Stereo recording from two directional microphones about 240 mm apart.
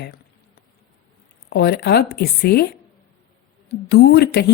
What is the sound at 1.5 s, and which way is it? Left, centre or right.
A woman's voice, left.